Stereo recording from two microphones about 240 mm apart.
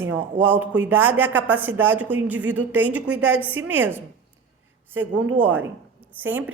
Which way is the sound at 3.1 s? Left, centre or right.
Right.